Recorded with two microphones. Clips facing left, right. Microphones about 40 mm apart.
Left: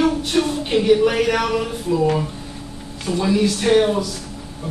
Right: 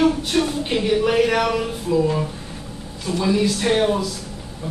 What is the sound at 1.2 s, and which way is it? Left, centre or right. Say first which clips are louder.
Speech: even; centre.